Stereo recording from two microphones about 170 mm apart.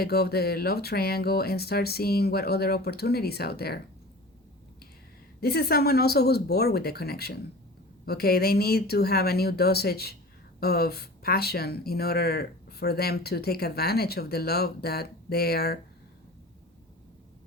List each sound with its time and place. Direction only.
0.0 s speech: 70° left (ahead or behind)
5.4 s speech: 65° left (ahead or behind)